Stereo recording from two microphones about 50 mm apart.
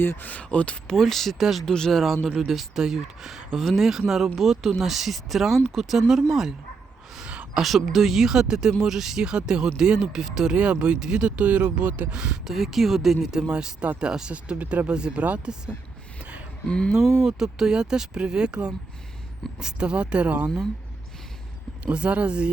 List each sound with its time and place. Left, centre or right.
0.0 s speech: left
0.3 s speech: left
0.9 s speech: centre
1.6 s speech: centre
7.6 s speech: centre; by 12.0 s right
12.1 s speech: centre
12.5 s speech: centre
14.5 s speech: right
14.8 s speech: centre
16.6 s speech: centre
16.9 s speech: centre; by 20.5 s right
21.8 s speech: right